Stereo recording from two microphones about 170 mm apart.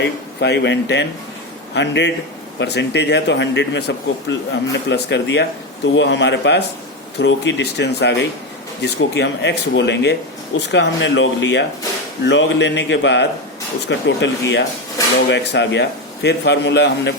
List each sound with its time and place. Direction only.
0.3 s speech: 90° left